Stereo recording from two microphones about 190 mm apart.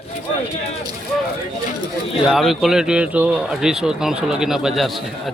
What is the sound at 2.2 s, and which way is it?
Speech, centre (ahead or behind).